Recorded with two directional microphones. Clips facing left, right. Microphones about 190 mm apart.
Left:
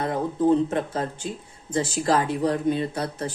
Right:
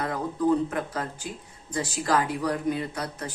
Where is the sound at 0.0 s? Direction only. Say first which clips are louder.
Left 3 dB; 25° left (ahead or behind).